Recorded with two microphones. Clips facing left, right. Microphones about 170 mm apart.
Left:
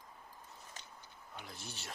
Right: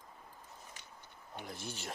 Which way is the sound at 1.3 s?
55° right (ahead or behind).